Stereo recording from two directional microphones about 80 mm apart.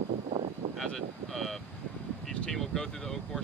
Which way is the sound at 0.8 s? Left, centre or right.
Centre.